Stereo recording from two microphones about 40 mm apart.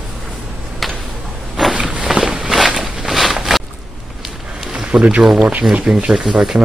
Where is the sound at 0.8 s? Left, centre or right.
Centre.